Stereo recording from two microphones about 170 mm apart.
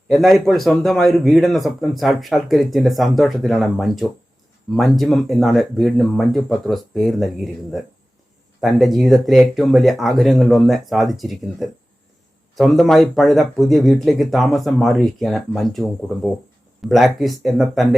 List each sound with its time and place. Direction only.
0.1 s a man's voice: centre (ahead or behind)